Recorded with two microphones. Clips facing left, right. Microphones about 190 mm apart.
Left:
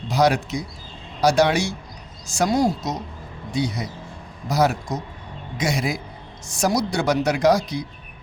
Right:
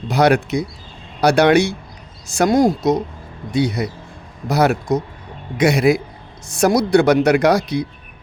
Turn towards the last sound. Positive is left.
turn(degrees=-65)  # may be behind; listen again after turning